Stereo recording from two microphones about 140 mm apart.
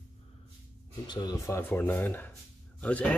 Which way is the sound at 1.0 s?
30° left (ahead or behind).